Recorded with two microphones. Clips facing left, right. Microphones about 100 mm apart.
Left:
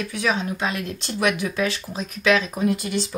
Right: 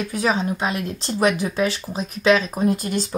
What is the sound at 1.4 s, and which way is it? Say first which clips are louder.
Speech: right 2 dB; 35° right (ahead or behind).